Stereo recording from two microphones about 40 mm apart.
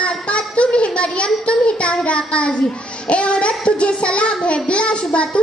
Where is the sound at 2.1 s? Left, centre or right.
Left.